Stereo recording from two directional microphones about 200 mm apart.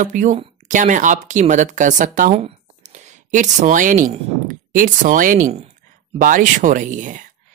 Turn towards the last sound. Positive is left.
turn(degrees=-40)  # may be behind; listen again after turning